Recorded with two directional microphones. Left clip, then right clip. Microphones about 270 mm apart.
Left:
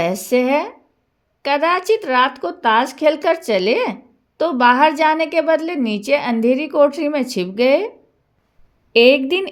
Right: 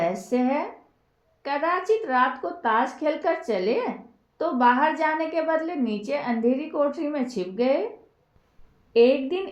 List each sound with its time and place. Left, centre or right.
0.0 s a woman's voice: left
8.9 s a woman's voice: left